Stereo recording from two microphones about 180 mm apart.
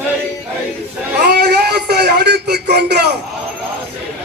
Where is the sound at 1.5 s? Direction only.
60° right (ahead or behind).